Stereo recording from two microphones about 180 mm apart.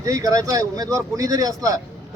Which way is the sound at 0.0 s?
20° right (ahead or behind).